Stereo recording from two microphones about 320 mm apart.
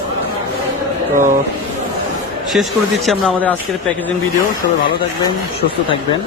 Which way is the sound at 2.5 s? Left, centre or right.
Centre.